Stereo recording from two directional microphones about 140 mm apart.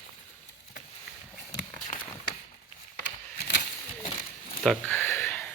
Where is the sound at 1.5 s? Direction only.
70° left (ahead or behind).